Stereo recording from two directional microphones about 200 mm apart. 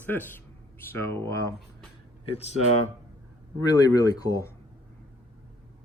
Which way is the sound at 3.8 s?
20° left (ahead or behind).